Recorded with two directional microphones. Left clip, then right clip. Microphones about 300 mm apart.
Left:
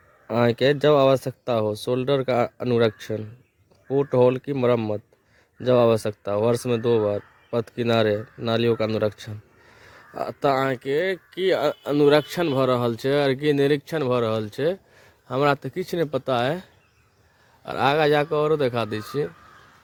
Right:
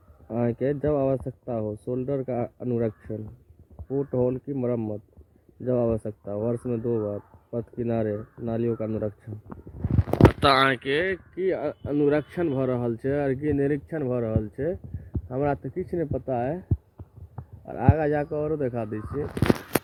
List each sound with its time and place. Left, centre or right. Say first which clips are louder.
0.3 s speech: left 7 dB; centre
10.4 s speech: right 2 dB; centre
17.7 s speech: left 6 dB; centre